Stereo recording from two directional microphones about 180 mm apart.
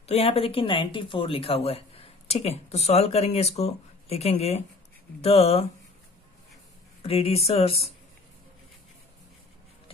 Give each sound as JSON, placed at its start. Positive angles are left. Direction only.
{"t": 0.0, "sound": "speech", "side_deg": 35}
{"t": 7.0, "sound": "speech", "side_deg": 35}